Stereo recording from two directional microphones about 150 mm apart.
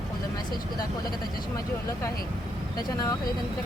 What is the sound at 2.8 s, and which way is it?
Speech, 25° left (ahead or behind).